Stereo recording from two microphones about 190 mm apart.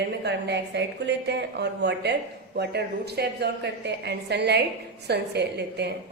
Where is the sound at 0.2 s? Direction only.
65° right (ahead or behind).